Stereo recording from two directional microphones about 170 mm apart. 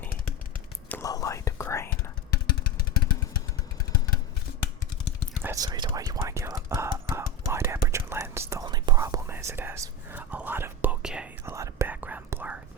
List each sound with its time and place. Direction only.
0.9 s whispering: 15° left (ahead or behind)
2.5 s vehicle: 60° left (ahead or behind)
5.4 s whispering: 15° right (ahead or behind)
11.5 s whispering: 15° right (ahead or behind)